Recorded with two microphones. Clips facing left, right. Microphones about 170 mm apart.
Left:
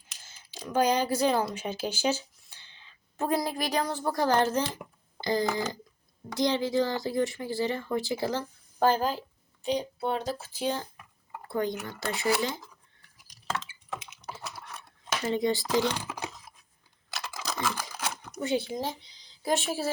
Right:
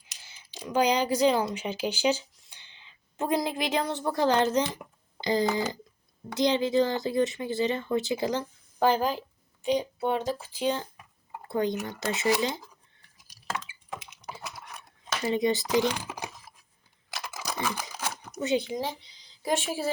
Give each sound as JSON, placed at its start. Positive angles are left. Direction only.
{"t": 0.2, "sound": "speech", "side_deg": -15}
{"t": 14.2, "sound": "typing", "side_deg": -15}
{"t": 15.3, "sound": "speech", "side_deg": -20}
{"t": 17.2, "sound": "computer keyboard", "side_deg": -15}
{"t": 18.3, "sound": "speech", "side_deg": -20}